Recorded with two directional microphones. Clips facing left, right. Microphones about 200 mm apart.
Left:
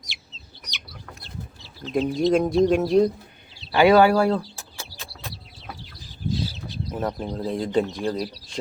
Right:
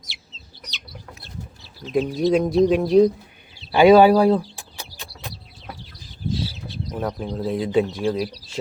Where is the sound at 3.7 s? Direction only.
15° right (ahead or behind).